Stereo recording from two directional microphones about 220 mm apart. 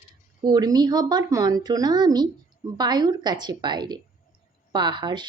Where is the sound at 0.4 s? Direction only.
20° right (ahead or behind).